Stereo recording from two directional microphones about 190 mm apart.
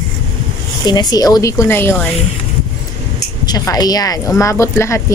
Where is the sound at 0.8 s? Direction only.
20° left (ahead or behind).